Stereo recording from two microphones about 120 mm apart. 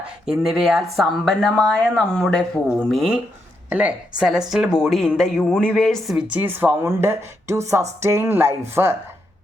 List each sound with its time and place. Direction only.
0.3 s speech: 5° right (ahead or behind)
3.7 s speech: 10° right (ahead or behind)